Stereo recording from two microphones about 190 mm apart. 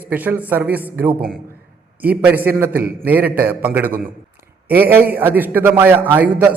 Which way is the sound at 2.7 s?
55° right (ahead or behind).